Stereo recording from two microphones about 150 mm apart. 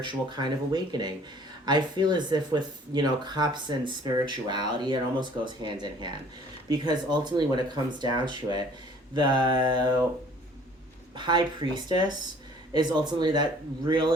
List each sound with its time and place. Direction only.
0.0 s speech: 30° right (ahead or behind)
11.1 s speech: 30° right (ahead or behind)